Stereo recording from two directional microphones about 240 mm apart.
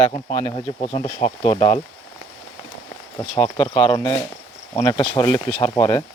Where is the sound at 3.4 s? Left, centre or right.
Left.